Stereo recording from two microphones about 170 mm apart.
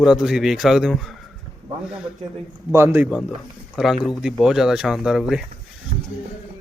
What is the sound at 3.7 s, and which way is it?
A man's voice, centre (ahead or behind).